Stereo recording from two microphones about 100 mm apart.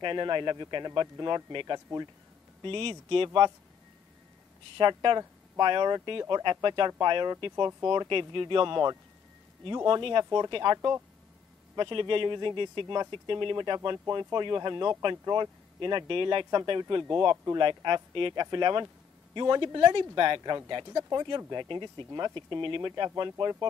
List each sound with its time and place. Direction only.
0.0 s speech: 55° right (ahead or behind)
2.6 s speech: 60° right (ahead or behind)
4.7 s speech: 50° right (ahead or behind)
8.1 s speech: 55° right (ahead or behind)
9.8 s speech: 55° right (ahead or behind)